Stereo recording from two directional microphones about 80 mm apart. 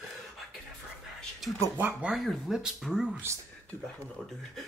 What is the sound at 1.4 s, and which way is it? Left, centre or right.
Speech, centre.